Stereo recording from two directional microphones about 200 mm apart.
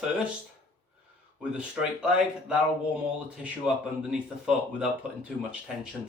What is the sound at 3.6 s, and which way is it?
Speech, 5° right (ahead or behind).